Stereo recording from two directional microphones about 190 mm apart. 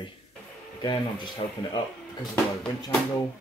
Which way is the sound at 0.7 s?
25° left (ahead or behind).